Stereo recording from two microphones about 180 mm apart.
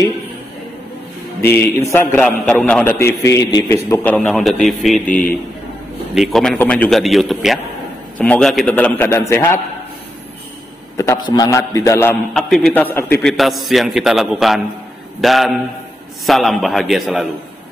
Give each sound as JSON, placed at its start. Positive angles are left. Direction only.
{"t": 1.4, "sound": "a man's voice", "side_deg": 15}
{"t": 11.0, "sound": "a man's voice", "side_deg": 20}
{"t": 12.4, "sound": "a man's voice", "side_deg": 0}